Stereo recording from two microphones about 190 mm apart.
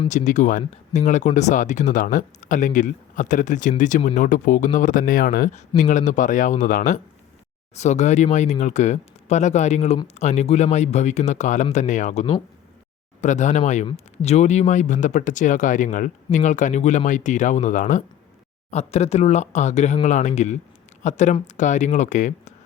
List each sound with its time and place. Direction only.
0.1 s speech: 40° left (ahead or behind)